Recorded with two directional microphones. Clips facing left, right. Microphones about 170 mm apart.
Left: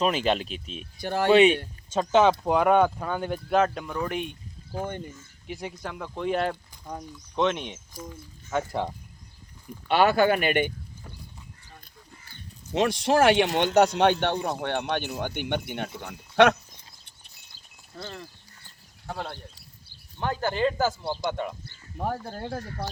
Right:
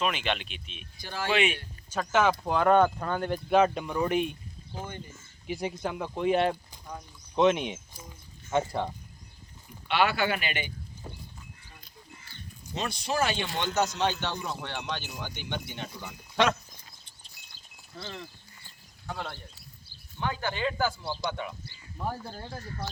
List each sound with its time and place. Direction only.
0.0 s speech: 35° left (ahead or behind)
1.0 s speech: 60° left (ahead or behind)
1.3 s speech: 35° left (ahead or behind)
1.9 s speech: 20° left (ahead or behind); by 4.4 s centre (ahead or behind)
5.5 s speech: 5° right (ahead or behind)
9.9 s speech: 45° left (ahead or behind)
12.7 s speech: 85° left
13.5 s speech: 60° left (ahead or behind)
17.9 s speech: 45° left (ahead or behind)
19.0 s a sound: 35° left (ahead or behind)
20.1 s speech: 40° left (ahead or behind); by 22.9 s 65° left (ahead or behind)